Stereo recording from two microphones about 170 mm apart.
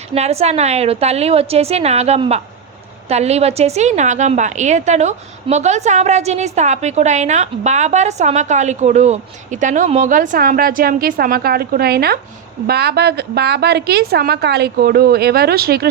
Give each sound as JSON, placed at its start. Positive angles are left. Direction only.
{"t": 0.1, "sound": "a woman's voice", "side_deg": -35}